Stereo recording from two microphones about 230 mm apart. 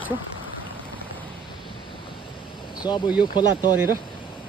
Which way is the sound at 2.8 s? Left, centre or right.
Centre.